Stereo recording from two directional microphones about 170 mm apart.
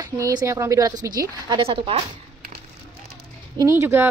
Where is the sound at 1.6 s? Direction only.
30° right (ahead or behind).